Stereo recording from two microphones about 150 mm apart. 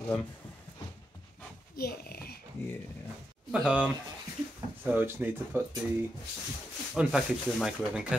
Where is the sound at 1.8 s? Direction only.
90° left.